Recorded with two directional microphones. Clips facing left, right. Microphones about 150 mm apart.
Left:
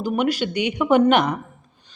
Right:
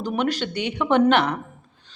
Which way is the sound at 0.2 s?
10° left (ahead or behind).